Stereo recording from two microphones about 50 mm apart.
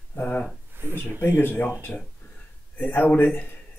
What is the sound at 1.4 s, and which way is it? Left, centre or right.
Speech, left.